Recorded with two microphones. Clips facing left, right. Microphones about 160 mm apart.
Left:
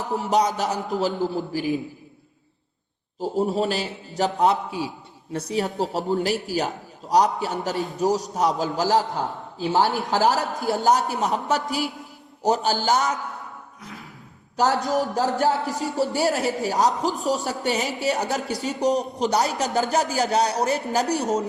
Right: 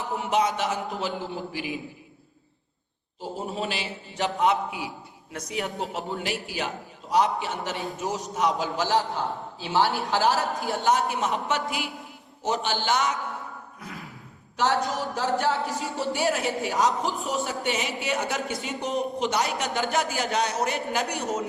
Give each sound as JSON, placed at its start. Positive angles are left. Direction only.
{"t": 0.0, "sound": "a man's voice", "side_deg": 40}
{"t": 3.2, "sound": "a man's voice", "side_deg": 40}
{"t": 14.5, "sound": "a man's voice", "side_deg": 40}